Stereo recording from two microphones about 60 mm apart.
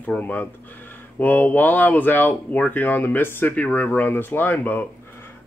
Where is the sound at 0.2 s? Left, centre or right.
Left.